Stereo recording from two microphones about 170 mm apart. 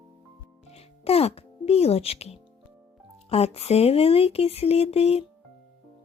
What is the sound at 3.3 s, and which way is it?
Speech, 35° left (ahead or behind).